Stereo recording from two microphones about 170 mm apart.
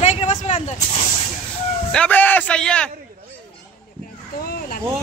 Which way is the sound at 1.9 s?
10° left (ahead or behind).